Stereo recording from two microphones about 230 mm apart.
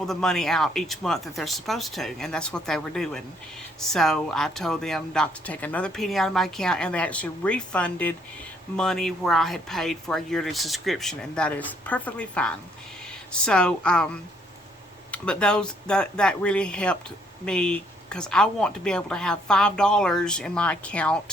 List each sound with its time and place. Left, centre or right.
0.0 s speech: centre